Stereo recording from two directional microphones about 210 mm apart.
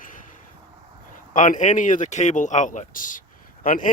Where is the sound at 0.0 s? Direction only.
40° left (ahead or behind).